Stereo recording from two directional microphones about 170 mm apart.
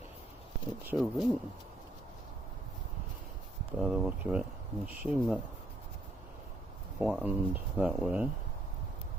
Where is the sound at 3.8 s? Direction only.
5° right (ahead or behind).